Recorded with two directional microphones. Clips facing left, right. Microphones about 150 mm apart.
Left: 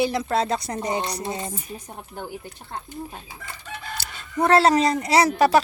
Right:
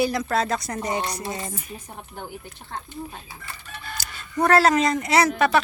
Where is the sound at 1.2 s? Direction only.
20° left (ahead or behind).